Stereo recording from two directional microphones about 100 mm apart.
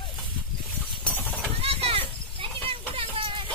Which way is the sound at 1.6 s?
75° right (ahead or behind).